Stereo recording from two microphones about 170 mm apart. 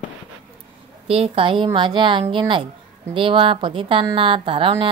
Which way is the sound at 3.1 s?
30° right (ahead or behind).